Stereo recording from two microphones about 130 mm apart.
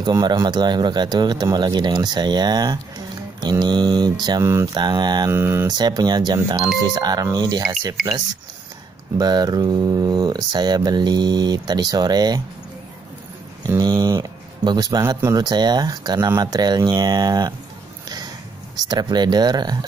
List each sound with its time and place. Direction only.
0.0 s speech: 30° right (ahead or behind)
4.7 s speech: 35° right (ahead or behind)
5.3 s speech: 20° right (ahead or behind)
5.7 s speech: 30° right (ahead or behind)
8.0 s speech: 5° left (ahead or behind)
9.2 s speech: 30° right (ahead or behind)
13.7 s speech: 30° right (ahead or behind)
18.0 s a sound: 30° right (ahead or behind)
18.8 s speech: 30° right (ahead or behind)